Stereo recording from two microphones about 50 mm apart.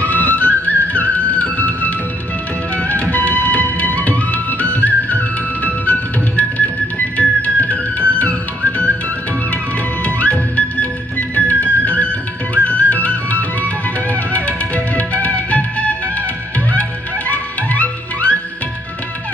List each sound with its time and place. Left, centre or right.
0.0 s music: left
10.0 s music: left